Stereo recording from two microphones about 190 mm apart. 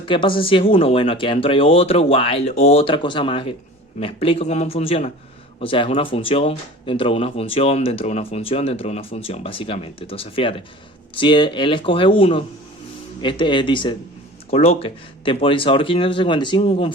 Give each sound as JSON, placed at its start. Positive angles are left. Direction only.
{"t": 0.0, "sound": "a man's voice", "side_deg": 25}